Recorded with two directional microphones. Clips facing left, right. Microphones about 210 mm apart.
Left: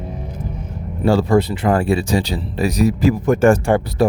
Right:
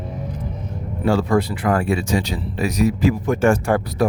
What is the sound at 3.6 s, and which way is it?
Speech, 25° left (ahead or behind).